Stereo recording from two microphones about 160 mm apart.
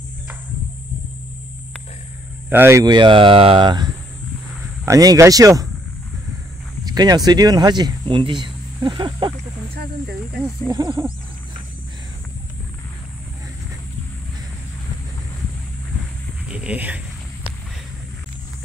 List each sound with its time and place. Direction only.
2.5 s speech: 15° right (ahead or behind)
2.9 s speech: 30° right (ahead or behind)
6.8 s speech: 25° right (ahead or behind)
10.4 s speech: 25° right (ahead or behind)
16.4 s speech: 5° right (ahead or behind)